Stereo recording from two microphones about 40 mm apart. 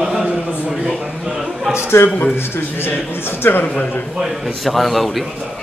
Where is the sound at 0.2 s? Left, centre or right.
Right.